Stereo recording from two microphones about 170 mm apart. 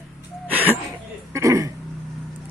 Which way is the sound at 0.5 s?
10° right (ahead or behind).